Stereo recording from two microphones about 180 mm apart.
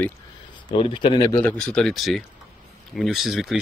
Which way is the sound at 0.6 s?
30° left (ahead or behind).